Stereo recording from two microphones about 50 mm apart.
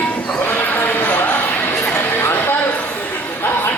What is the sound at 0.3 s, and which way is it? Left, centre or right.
Basketball bounce, left.